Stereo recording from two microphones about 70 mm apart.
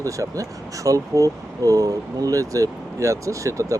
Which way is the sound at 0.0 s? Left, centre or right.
Right.